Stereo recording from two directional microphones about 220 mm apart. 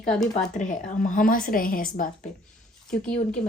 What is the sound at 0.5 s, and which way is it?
A woman's voice, 35° left (ahead or behind).